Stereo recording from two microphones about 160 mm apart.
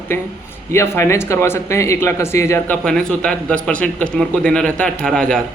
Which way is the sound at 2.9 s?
5° left (ahead or behind).